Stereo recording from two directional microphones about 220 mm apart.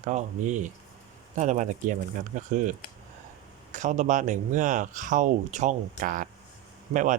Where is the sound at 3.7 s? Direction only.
35° right (ahead or behind).